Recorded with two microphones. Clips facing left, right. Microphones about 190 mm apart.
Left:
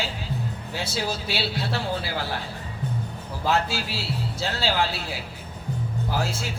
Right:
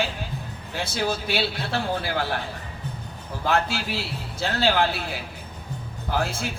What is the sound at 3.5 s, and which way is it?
Speech, 55° right (ahead or behind).